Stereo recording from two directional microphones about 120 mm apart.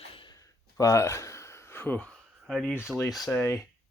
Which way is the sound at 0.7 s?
25° left (ahead or behind).